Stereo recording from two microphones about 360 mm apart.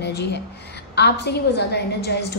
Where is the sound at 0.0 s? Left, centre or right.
Left.